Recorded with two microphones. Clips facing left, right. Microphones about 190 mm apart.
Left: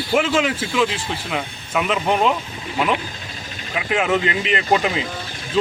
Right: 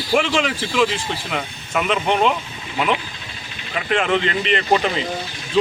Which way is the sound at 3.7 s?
5° left (ahead or behind).